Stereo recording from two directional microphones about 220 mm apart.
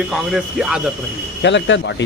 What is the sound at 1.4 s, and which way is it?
Speech, 55° left (ahead or behind).